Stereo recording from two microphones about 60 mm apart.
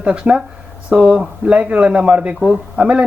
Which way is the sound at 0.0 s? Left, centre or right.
Centre.